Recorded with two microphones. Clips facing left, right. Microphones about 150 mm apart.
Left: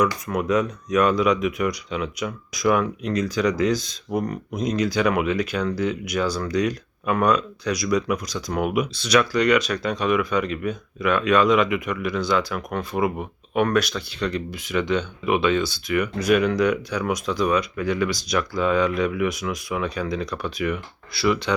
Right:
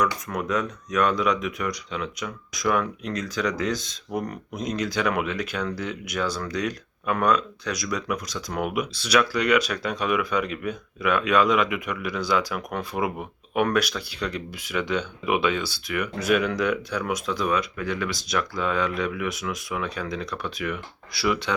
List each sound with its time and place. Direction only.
0.0 s speech: 5° left (ahead or behind)